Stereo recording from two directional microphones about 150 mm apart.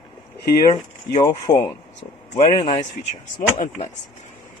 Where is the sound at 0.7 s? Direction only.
40° left (ahead or behind).